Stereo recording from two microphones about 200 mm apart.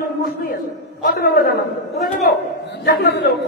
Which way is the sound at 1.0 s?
50° left (ahead or behind).